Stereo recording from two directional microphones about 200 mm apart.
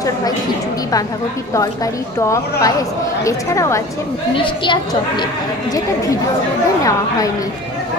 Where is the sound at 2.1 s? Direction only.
15° left (ahead or behind).